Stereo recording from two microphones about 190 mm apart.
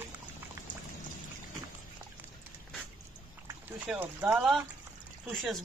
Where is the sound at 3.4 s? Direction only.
10° right (ahead or behind).